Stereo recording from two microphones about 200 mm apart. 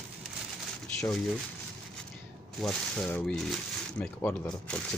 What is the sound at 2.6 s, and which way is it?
Speech, 5° left (ahead or behind).